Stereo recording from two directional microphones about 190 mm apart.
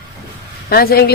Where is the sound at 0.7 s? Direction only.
55° left (ahead or behind).